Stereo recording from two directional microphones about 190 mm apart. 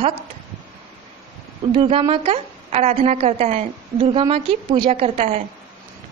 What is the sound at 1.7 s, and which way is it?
A woman's voice, 25° right (ahead or behind).